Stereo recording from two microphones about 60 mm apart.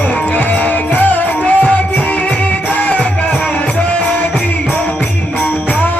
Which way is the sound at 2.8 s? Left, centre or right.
Left.